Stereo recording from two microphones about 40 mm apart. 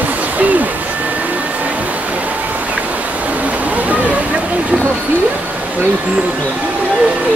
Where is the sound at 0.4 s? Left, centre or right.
Right.